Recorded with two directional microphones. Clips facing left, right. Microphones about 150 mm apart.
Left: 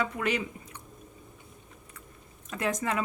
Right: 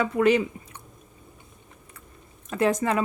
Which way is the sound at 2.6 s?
35° right (ahead or behind).